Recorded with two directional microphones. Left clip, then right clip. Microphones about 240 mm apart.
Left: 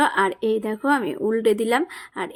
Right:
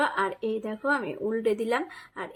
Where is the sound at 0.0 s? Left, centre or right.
Left.